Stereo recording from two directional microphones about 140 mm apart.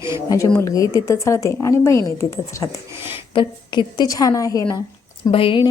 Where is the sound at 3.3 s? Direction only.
30° left (ahead or behind).